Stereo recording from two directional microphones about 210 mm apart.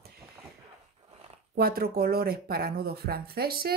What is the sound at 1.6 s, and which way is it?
Speech, 45° right (ahead or behind).